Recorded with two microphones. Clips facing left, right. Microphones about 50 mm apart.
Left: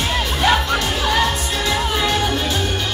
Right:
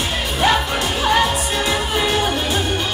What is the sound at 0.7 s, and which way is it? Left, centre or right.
Music, centre.